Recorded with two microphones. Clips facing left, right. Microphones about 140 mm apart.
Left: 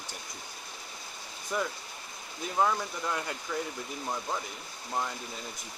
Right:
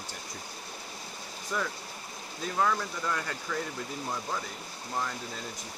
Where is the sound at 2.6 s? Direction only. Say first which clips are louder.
Left 1 dB; 20° left (ahead or behind).